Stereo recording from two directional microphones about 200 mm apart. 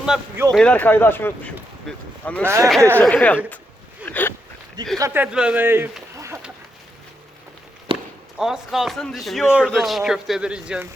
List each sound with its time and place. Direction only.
0.0 s speech: 5° right (ahead or behind)
2.4 s speech: 15° right (ahead or behind)
3.0 s speech: 5° left (ahead or behind)
4.0 s a sound: 10° left (ahead or behind)
4.9 s speech: 10° right (ahead or behind)
7.9 s chop: 25° right (ahead or behind)
8.4 s speech: 5° right (ahead or behind)